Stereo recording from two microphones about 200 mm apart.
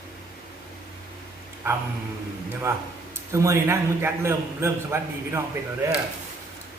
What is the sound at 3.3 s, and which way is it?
A man's voice, 15° right (ahead or behind).